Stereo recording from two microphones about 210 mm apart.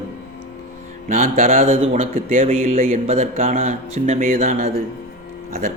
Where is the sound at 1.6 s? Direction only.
30° right (ahead or behind).